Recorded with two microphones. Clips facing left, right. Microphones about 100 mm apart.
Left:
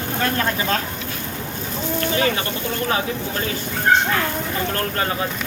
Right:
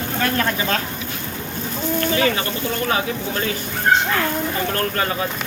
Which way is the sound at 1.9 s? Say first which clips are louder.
Right 1 dB; 30° left (ahead or behind).